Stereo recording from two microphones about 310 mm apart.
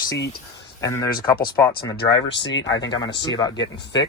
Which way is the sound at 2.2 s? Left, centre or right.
Left.